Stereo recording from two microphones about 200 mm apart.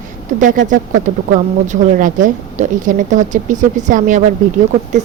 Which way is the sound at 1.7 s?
40° right (ahead or behind).